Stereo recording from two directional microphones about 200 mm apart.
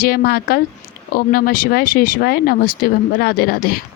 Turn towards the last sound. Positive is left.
turn(degrees=50)  # may be behind; listen again after turning